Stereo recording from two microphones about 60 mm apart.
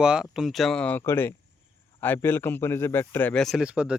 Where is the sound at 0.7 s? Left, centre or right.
Left.